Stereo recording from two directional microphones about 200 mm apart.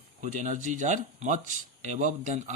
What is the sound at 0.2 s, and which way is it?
Speech, 40° right (ahead or behind).